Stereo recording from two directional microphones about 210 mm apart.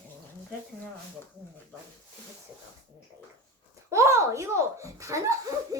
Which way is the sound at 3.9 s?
15° right (ahead or behind).